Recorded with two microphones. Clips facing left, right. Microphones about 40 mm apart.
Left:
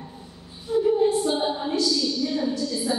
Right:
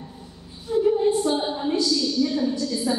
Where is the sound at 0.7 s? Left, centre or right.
Centre.